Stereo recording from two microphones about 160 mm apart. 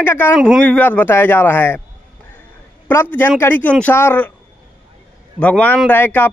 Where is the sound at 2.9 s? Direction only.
15° left (ahead or behind).